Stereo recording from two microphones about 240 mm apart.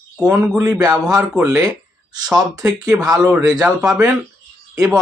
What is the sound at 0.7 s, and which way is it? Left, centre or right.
Speech, centre.